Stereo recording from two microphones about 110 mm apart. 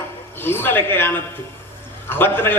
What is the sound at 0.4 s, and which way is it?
A man's voice, 20° left (ahead or behind).